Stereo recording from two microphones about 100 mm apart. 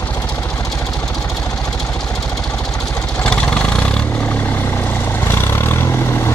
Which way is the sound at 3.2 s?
10° left (ahead or behind).